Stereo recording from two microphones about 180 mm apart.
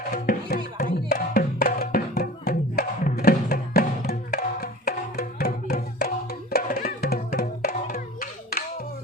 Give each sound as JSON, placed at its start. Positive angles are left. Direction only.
{"t": 0.1, "sound": "music", "side_deg": 55}